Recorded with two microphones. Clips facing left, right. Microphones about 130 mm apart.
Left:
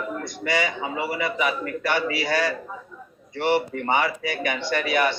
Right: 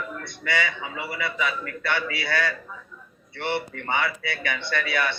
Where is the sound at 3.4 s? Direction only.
40° left (ahead or behind).